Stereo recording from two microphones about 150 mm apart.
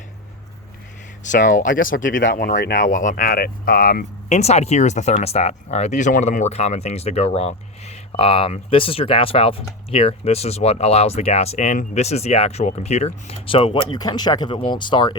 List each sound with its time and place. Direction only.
1.2 s speech: 60° left (ahead or behind)
4.3 s speech: 45° left (ahead or behind); by 15.1 s 30° left (ahead or behind)